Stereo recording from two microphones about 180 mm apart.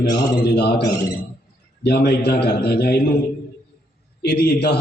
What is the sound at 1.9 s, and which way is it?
A man's voice, 65° left (ahead or behind).